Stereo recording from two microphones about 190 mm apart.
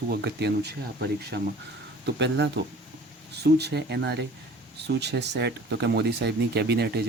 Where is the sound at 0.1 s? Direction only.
60° right (ahead or behind).